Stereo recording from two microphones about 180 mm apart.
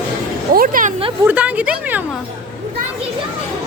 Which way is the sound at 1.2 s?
10° right (ahead or behind).